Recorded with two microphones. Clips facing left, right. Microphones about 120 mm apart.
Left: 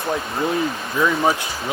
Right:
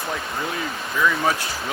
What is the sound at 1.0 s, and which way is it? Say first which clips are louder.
Speech: left 3 dB; 20° left (ahead or behind).